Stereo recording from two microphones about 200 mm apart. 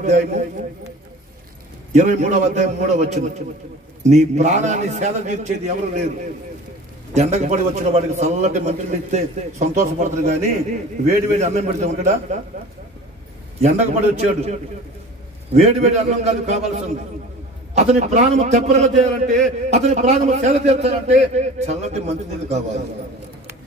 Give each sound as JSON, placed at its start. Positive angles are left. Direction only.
{"t": 0.0, "sound": "a man's voice", "side_deg": -35}
{"t": 1.9, "sound": "a man's voice", "side_deg": -35}
{"t": 7.2, "sound": "a man's voice", "side_deg": -35}
{"t": 13.6, "sound": "a man's voice", "side_deg": -35}